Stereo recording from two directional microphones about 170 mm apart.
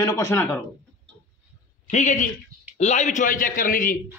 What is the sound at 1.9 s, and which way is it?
A man's voice, 45° left (ahead or behind).